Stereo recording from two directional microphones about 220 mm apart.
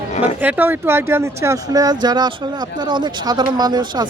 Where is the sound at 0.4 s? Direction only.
10° right (ahead or behind).